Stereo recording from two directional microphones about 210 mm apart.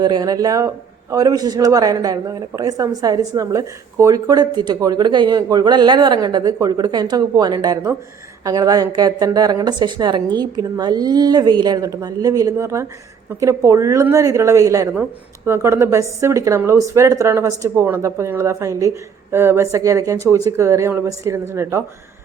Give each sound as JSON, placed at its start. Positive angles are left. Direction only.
{"t": 0.0, "sound": "a woman's voice", "side_deg": -20}